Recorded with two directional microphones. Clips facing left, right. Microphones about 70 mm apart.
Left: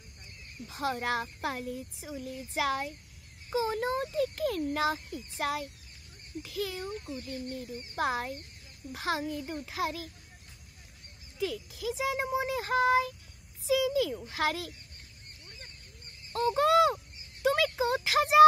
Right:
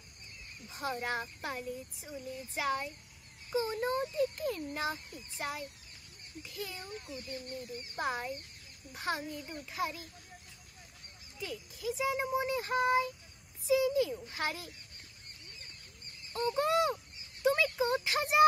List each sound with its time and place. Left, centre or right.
0.7 s a child's voice: left
8.0 s a child's voice: left
11.3 s speech: left
16.3 s speech: left